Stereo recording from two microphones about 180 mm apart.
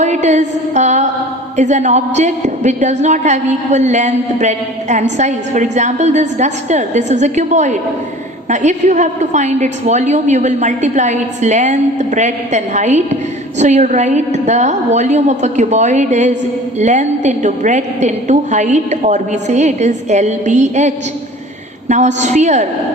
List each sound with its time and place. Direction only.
0.0 s a woman's voice: 40° right (ahead or behind)